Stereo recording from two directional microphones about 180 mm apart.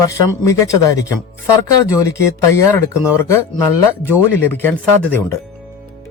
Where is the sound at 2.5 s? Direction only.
15° left (ahead or behind).